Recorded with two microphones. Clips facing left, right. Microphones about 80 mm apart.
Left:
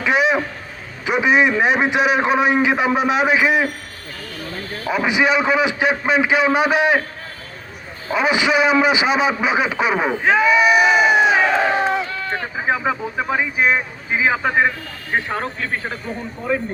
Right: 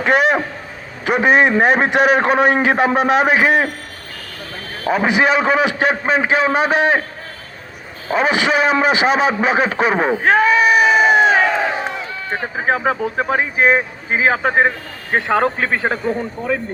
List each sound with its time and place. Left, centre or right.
0.0 s a man's voice: right
4.9 s a man's voice: right
8.1 s a man's voice: right
10.2 s screaming: right
10.9 s crowd: centre
12.5 s a man's voice: right
15.3 s speech: right